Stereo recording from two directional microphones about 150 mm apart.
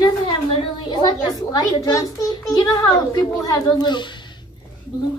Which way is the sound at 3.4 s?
25° left (ahead or behind).